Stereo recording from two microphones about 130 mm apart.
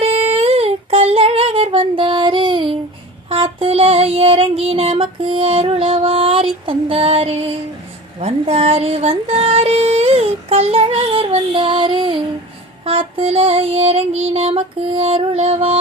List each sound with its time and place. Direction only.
0.0 s humming: 50° right (ahead or behind)
3.2 s child singing: 45° right (ahead or behind)